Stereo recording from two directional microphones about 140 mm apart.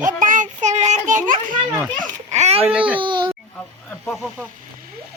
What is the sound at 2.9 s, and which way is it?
Music, 35° right (ahead or behind).